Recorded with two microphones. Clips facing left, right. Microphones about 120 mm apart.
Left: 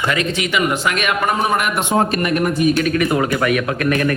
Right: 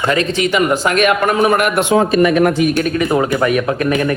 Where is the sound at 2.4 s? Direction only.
75° right (ahead or behind).